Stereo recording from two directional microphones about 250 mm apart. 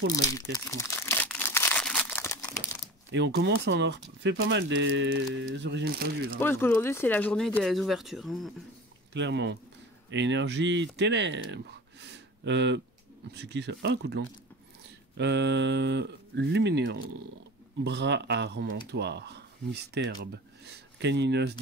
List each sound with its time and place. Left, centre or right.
0.1 s crumpling: centre
3.1 s speech: right
6.4 s speech: centre
9.1 s speech: right